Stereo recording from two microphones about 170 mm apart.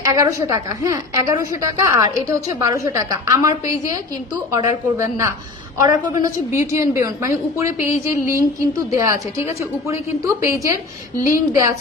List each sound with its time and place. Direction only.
0.0 s a woman's voice: 20° right (ahead or behind)